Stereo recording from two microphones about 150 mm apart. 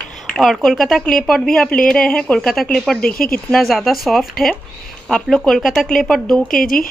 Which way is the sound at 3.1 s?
75° left (ahead or behind).